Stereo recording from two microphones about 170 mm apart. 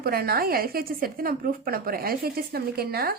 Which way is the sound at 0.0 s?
60° right (ahead or behind).